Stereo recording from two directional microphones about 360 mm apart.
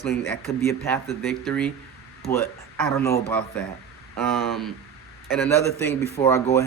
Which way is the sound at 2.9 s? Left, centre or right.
Centre.